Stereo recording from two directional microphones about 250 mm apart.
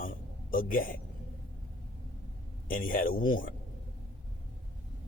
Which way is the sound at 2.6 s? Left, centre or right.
Left.